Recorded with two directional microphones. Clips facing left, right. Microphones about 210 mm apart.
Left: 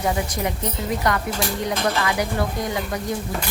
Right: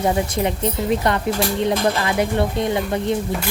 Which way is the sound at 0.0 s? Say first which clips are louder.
Right 4 dB; 25° right (ahead or behind).